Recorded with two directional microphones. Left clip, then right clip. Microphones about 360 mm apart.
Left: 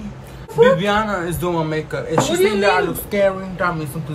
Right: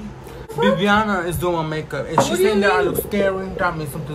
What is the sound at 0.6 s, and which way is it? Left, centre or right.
A man's voice, centre.